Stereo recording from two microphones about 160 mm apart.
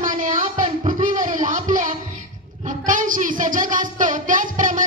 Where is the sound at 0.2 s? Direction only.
55° right (ahead or behind).